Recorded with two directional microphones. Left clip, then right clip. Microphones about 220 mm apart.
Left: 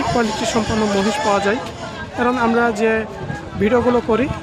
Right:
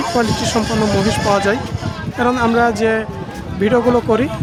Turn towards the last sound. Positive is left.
turn(degrees=-15)  # may be behind; listen again after turning